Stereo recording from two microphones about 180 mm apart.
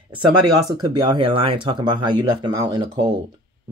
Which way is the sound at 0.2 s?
20° right (ahead or behind).